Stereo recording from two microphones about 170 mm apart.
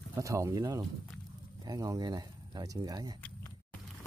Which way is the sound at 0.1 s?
20° right (ahead or behind).